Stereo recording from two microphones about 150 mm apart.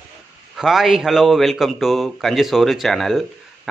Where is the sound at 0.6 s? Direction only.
Centre (ahead or behind).